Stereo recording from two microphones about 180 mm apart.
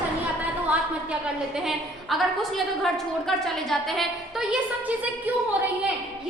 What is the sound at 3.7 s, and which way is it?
Speech, centre (ahead or behind).